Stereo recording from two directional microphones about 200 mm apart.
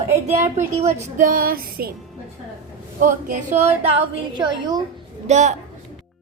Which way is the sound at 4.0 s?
20° right (ahead or behind).